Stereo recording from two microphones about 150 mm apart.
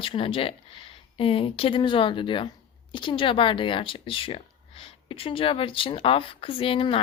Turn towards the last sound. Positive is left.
turn(degrees=35)  # may be behind; listen again after turning